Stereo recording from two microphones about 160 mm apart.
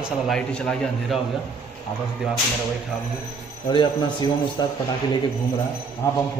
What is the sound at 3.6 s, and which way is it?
Speech, 30° left (ahead or behind).